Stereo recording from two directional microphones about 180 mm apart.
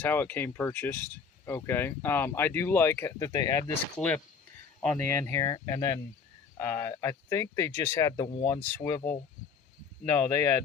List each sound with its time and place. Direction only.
0.0 s speech: 10° left (ahead or behind)
3.9 s speech: 5° left (ahead or behind)
10.1 s speech: 10° left (ahead or behind)